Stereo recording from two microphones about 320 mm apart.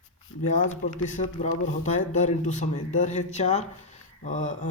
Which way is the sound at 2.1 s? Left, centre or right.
Left.